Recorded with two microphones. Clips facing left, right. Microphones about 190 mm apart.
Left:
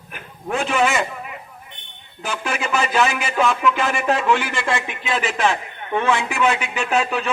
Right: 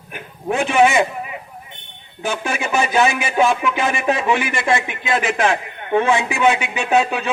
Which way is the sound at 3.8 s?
15° right (ahead or behind).